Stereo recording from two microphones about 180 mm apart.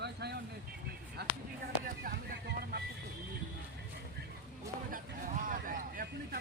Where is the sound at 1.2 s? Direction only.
65° right (ahead or behind).